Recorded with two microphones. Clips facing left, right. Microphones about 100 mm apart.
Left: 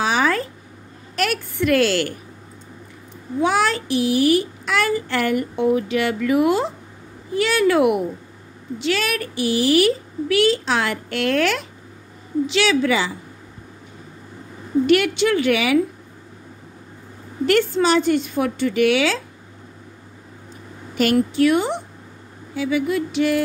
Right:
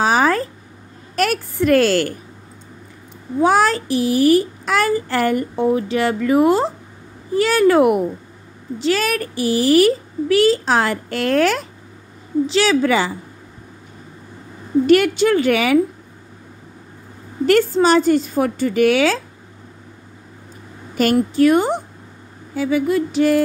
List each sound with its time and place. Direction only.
0.0 s a sound: 40° right (ahead or behind)
1.1 s a woman's voice: 40° right (ahead or behind)
3.3 s a child's voice: 40° right (ahead or behind)
14.9 s a child's voice: 40° right (ahead or behind)
17.5 s a child's voice: 40° right (ahead or behind)
20.9 s a woman's voice: 40° right (ahead or behind)